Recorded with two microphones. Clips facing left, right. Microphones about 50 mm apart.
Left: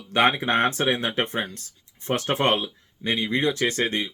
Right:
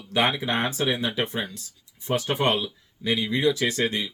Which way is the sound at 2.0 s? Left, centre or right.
Left.